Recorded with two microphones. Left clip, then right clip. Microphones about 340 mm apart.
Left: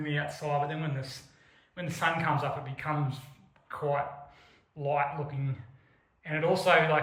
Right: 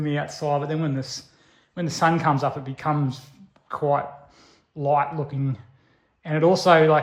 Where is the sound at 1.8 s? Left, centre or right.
Centre.